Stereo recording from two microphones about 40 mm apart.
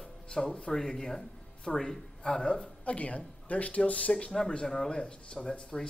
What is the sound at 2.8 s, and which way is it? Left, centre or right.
Speech, left.